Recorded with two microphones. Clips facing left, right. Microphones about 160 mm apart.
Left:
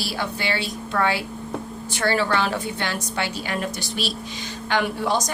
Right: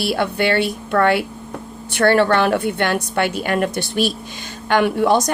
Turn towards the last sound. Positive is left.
turn(degrees=-60)  # may be behind; listen again after turning